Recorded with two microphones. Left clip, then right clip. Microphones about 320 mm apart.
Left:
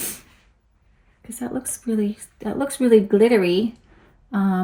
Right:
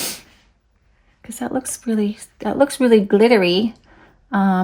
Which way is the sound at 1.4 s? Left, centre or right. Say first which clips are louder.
Right 5 dB; right.